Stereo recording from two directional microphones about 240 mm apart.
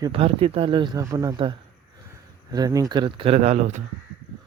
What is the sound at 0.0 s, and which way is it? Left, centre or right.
Speech, right.